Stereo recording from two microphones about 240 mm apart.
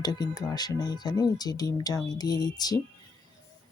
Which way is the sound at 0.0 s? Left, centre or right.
Centre.